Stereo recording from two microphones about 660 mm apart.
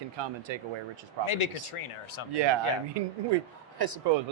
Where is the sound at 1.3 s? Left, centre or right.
Left.